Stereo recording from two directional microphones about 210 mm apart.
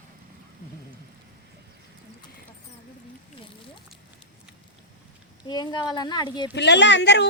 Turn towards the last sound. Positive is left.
turn(degrees=55)  # may be behind; listen again after turning